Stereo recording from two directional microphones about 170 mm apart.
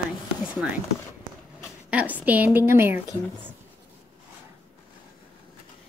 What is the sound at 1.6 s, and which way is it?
Speech, 10° right (ahead or behind).